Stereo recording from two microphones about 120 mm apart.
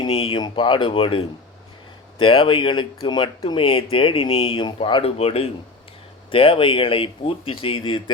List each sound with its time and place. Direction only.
0.0 s speech: 50° left (ahead or behind)
5.1 s a man's voice: 55° left (ahead or behind)